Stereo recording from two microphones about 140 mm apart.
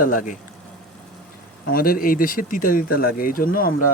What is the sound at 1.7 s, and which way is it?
Speech, 90° left.